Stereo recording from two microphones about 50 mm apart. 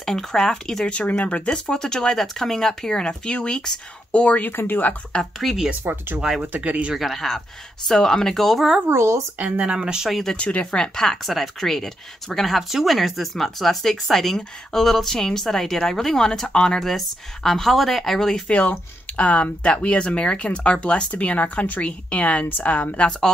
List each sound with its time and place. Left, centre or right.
0.0 s speech: centre
0.8 s speech: left
1.5 s speech: centre
4.1 s speech: left
4.4 s speech: left
5.2 s speech: centre
5.9 s speech: right
7.0 s speech: centre
8.9 s speech: right
9.7 s speech: centre
10.3 s speech: left
11.2 s speech: centre
16.8 s speech: centre
18.5 s speech: left